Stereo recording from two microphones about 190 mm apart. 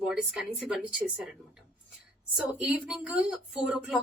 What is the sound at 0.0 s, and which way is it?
Speech, 5° right (ahead or behind).